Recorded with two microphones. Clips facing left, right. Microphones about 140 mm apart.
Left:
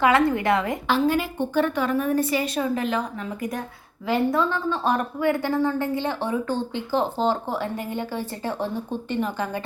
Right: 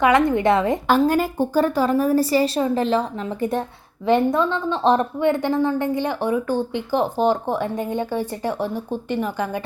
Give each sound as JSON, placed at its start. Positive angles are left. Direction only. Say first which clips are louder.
{"t": 0.0, "sound": "a woman's voice", "louder": "right 3 dB", "side_deg": -20}
{"t": 0.9, "sound": "a woman's voice", "louder": "right 3 dB", "side_deg": -45}